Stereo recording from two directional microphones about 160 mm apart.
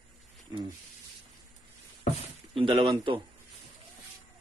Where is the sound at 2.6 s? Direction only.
30° right (ahead or behind).